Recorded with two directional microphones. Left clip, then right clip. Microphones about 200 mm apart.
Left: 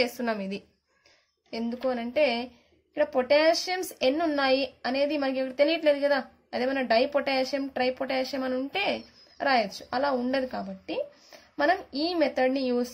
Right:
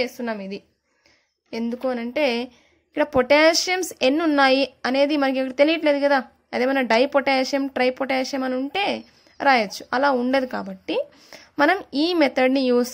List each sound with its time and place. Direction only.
0.0 s a woman's voice: 15° right (ahead or behind)
1.5 s a woman's voice: 25° right (ahead or behind)